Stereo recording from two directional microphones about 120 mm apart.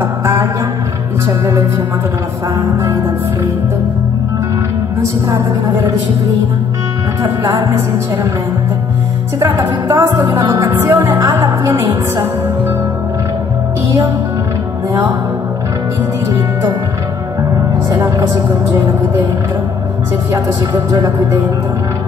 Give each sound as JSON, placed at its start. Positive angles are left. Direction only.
{"t": 0.2, "sound": "music", "side_deg": -20}
{"t": 7.4, "sound": "a woman's voice", "side_deg": -40}
{"t": 9.4, "sound": "music", "side_deg": -20}
{"t": 11.7, "sound": "a woman's voice", "side_deg": -40}
{"t": 17.6, "sound": "a woman's voice", "side_deg": -20}
{"t": 20.3, "sound": "music", "side_deg": -20}
{"t": 20.9, "sound": "a woman's voice", "side_deg": -40}